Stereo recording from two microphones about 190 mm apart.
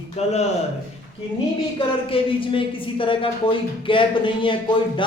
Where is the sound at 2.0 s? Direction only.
30° left (ahead or behind).